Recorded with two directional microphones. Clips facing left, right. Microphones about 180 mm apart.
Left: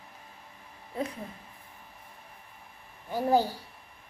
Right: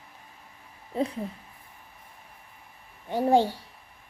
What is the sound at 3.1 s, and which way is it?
Speech, 25° right (ahead or behind).